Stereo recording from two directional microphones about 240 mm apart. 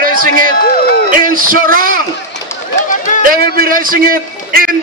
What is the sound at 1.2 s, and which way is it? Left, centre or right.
Speech, right.